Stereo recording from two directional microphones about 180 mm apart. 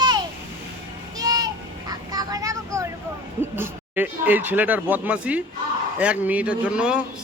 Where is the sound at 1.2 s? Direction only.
20° right (ahead or behind).